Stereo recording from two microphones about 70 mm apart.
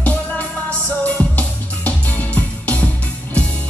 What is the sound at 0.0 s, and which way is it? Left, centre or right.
Music, centre.